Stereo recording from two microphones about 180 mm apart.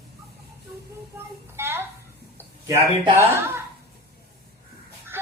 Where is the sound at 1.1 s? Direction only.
15° right (ahead or behind).